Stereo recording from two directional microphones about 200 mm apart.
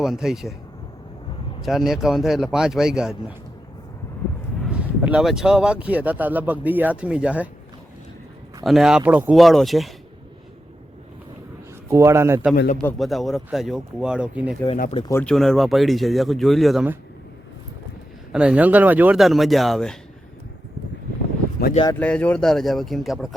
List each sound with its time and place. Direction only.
0.0 s speech: centre (ahead or behind)
1.6 s speech: centre (ahead or behind)
4.6 s speech: 5° right (ahead or behind)
8.6 s speech: centre (ahead or behind)
11.9 s speech: 15° right (ahead or behind)
12.8 s speech: centre (ahead or behind)
14.8 s speech: 35° left (ahead or behind)
15.0 s speech: 10° left (ahead or behind)
18.3 s speech: 5° right (ahead or behind)
21.9 s speech: 5° left (ahead or behind)